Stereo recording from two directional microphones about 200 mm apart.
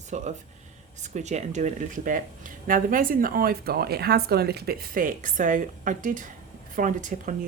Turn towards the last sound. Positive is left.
turn(degrees=-40)  # may be behind; listen again after turning